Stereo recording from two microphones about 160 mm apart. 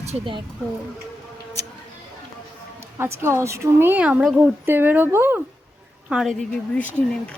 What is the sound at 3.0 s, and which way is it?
A woman's voice, 15° right (ahead or behind).